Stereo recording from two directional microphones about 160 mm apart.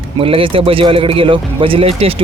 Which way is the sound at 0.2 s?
35° right (ahead or behind).